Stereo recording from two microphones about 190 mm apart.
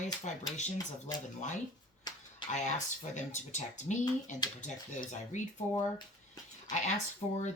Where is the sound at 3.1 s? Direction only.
40° left (ahead or behind).